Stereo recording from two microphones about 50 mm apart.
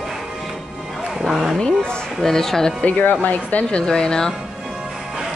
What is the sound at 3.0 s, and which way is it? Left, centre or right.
Speech, left.